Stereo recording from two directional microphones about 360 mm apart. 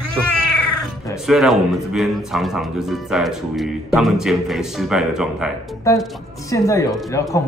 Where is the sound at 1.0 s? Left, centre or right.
Centre.